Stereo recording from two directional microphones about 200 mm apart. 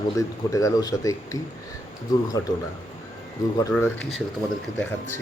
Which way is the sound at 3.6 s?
10° left (ahead or behind).